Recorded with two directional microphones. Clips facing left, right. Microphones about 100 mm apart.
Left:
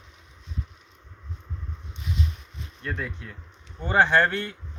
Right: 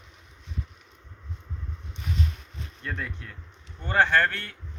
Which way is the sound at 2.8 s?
5° left (ahead or behind).